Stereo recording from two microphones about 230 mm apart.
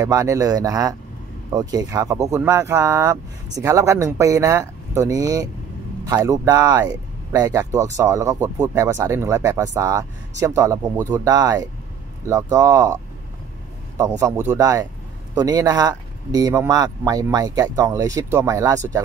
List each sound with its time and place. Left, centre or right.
0.0 s speech: centre